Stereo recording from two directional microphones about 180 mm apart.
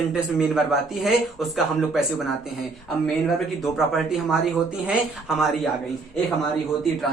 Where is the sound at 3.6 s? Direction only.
Centre (ahead or behind).